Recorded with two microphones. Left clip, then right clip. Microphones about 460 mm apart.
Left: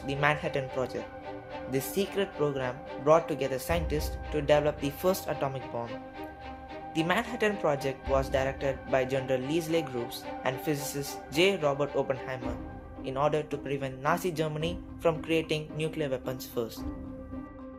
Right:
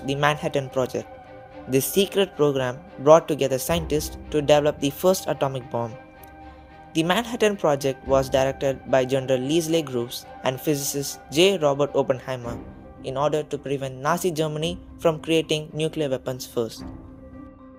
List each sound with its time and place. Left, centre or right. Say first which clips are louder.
0.0 s speech: right 5 dB; centre
6.9 s speech: right 6 dB; centre